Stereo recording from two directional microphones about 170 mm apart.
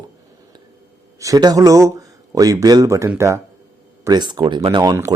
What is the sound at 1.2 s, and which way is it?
A man's voice, 20° right (ahead or behind).